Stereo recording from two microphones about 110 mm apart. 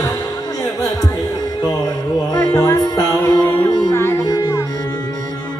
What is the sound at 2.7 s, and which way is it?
Music, 35° left (ahead or behind).